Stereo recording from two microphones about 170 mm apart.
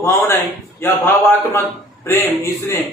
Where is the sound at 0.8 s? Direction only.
15° left (ahead or behind).